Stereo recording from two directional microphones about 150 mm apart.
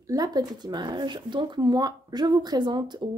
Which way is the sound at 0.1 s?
25° right (ahead or behind).